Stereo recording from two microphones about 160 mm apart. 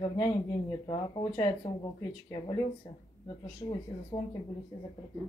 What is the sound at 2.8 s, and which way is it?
Speech, 25° left (ahead or behind).